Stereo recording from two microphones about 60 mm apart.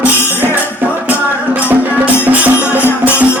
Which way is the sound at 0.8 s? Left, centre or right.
Right.